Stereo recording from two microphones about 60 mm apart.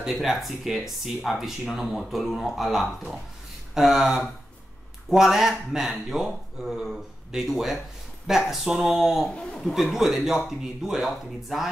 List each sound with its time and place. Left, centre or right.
0.0 s speech: centre
9.3 s a man's voice: centre
9.9 s speech: centre